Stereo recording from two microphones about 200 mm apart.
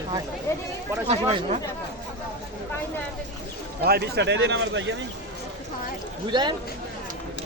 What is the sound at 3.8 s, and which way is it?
Speech, 55° right (ahead or behind).